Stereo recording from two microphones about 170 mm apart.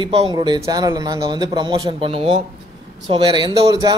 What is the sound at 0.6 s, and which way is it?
A man's voice, 20° right (ahead or behind).